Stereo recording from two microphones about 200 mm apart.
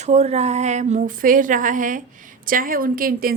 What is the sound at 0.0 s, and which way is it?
A woman's voice, 35° right (ahead or behind).